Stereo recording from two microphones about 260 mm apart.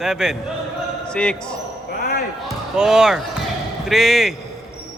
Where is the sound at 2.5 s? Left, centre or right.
Centre.